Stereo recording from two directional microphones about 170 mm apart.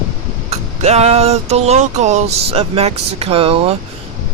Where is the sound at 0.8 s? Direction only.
40° right (ahead or behind).